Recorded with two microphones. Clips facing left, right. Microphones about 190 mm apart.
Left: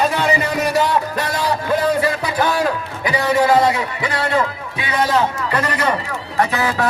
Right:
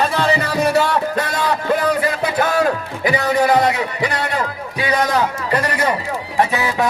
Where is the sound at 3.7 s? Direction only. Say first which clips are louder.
Right 2 dB; 20° right (ahead or behind).